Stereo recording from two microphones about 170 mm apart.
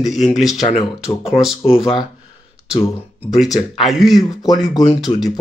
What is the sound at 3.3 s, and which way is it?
Speech, centre (ahead or behind).